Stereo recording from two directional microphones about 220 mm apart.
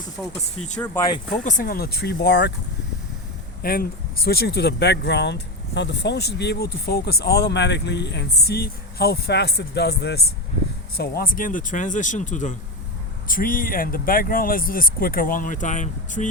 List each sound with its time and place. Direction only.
0.8 s speech: 15° left (ahead or behind)
1.3 s speech: 40° left (ahead or behind)
3.6 s speech: 40° left (ahead or behind)